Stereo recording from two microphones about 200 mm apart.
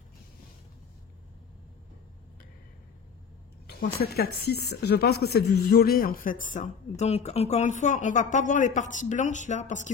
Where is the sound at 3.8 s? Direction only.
50° left (ahead or behind).